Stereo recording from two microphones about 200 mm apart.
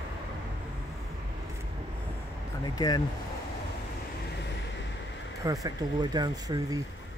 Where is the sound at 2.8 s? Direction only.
20° left (ahead or behind).